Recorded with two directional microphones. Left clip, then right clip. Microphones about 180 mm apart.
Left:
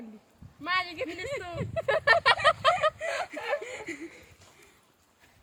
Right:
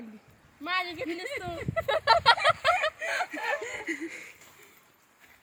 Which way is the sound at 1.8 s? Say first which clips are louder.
Right 1 dB; 30° left (ahead or behind).